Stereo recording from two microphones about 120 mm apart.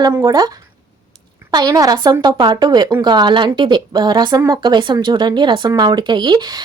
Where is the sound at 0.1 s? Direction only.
25° right (ahead or behind).